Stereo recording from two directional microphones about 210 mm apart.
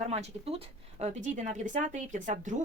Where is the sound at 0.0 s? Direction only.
30° right (ahead or behind).